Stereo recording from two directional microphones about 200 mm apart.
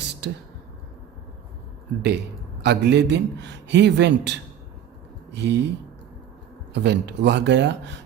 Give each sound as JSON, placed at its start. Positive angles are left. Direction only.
{"t": 0.0, "sound": "a sound", "side_deg": -55}
{"t": 2.0, "sound": "a man's voice", "side_deg": -55}
{"t": 6.7, "sound": "a man's voice", "side_deg": -60}